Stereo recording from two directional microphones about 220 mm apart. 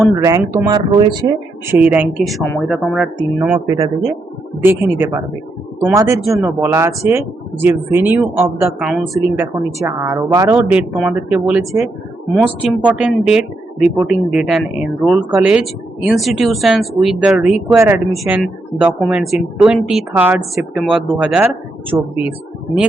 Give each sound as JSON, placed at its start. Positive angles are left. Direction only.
{"t": 0.2, "sound": "speech", "side_deg": -15}
{"t": 1.6, "sound": "a woman's voice", "side_deg": -5}
{"t": 3.7, "sound": "speech", "side_deg": -15}
{"t": 6.2, "sound": "a woman's voice", "side_deg": 0}
{"t": 6.6, "sound": "speech", "side_deg": -15}
{"t": 9.7, "sound": "a woman's voice", "side_deg": -15}
{"t": 21.9, "sound": "speech", "side_deg": -15}